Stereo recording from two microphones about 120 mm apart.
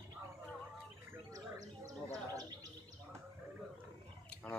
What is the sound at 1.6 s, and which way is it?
Bird, 30° right (ahead or behind).